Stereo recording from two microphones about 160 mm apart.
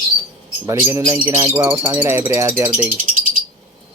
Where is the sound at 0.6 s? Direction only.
25° right (ahead or behind).